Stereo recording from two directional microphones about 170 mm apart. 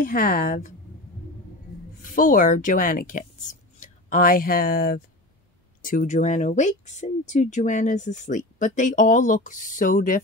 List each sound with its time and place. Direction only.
0.0 s a woman's voice: 55° left (ahead or behind)
2.0 s speech: 50° left (ahead or behind)